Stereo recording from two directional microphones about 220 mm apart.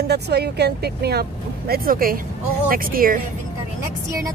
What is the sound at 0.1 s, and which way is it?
Speech, 50° right (ahead or behind).